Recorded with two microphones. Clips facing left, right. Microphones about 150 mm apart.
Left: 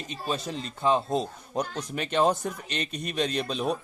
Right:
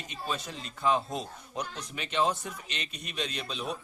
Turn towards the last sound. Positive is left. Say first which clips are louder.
# left 8 dB
turn(degrees=45)  # may be behind; listen again after turning